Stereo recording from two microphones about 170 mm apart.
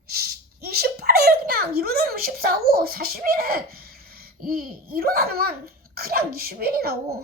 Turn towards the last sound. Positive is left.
turn(degrees=-65)  # may be behind; listen again after turning